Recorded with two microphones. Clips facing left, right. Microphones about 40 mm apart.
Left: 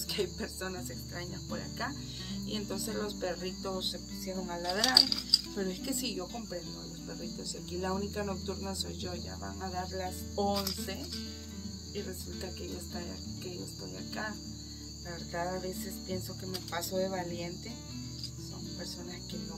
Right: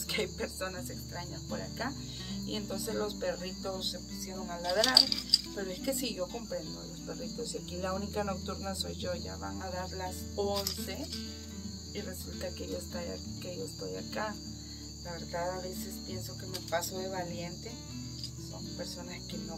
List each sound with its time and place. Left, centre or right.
0.1 s speech: right
1.5 s speech: centre
3.7 s music: centre
4.6 s speech: centre
7.1 s cricket: centre
9.9 s music: centre
10.8 s cricket: centre
15.3 s speech: centre
16.7 s music: centre